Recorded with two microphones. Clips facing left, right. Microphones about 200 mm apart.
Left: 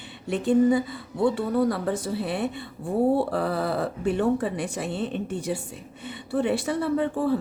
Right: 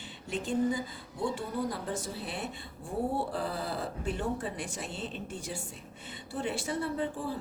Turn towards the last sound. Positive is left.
turn(degrees=65)  # may be behind; listen again after turning